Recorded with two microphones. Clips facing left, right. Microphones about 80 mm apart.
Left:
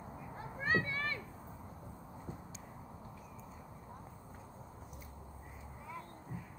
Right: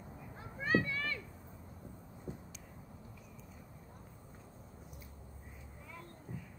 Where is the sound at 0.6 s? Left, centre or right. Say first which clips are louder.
Right 1 dB; left.